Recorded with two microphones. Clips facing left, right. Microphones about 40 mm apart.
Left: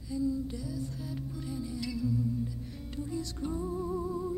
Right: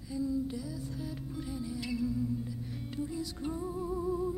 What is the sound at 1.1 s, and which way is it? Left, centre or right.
Music, centre.